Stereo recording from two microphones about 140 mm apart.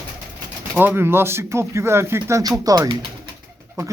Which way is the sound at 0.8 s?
15° right (ahead or behind).